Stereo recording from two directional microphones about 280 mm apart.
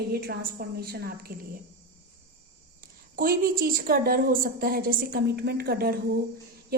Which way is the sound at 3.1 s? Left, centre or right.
Right.